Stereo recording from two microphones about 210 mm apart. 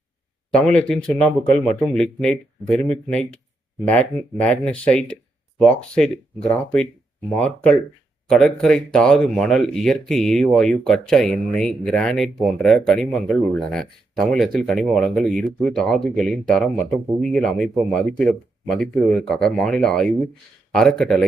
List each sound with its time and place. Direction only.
0.5 s speech: 5° left (ahead or behind)